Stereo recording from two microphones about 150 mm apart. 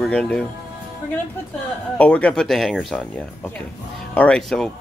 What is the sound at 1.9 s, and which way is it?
Speech, 10° left (ahead or behind).